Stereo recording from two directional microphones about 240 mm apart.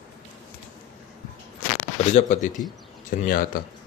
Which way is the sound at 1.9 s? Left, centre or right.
Left.